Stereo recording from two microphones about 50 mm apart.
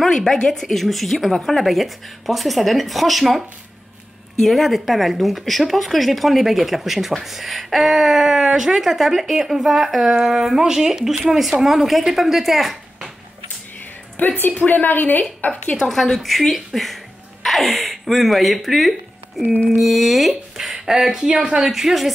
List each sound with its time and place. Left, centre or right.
0.0 s speech: centre
14.1 s a woman's voice: left
15.9 s speech: centre